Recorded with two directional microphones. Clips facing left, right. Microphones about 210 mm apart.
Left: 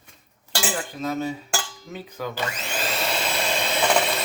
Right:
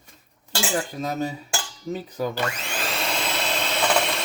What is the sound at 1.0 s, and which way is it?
Speech, 40° right (ahead or behind).